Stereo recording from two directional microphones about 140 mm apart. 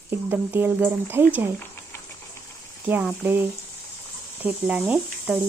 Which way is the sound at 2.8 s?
10° right (ahead or behind).